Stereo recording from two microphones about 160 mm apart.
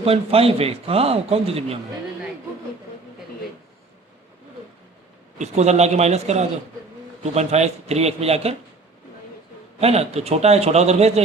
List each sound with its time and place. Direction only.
0.0 s a man's voice: 35° right (ahead or behind)
5.4 s a man's voice: 45° right (ahead or behind)
9.8 s a man's voice: 40° right (ahead or behind)